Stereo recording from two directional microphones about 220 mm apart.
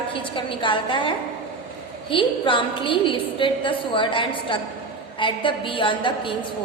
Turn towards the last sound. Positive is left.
turn(degrees=20)  # may be behind; listen again after turning